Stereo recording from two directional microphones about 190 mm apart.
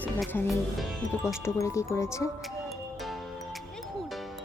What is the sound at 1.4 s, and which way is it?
Speech, 15° left (ahead or behind).